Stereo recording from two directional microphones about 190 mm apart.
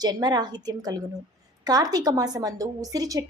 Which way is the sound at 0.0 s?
20° right (ahead or behind).